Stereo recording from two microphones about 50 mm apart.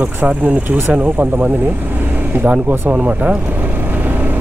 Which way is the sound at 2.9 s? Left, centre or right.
Right.